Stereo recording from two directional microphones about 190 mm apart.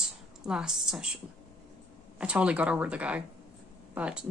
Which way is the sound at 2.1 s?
5° right (ahead or behind).